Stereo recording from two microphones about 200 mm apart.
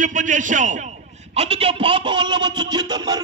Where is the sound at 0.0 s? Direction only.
40° right (ahead or behind).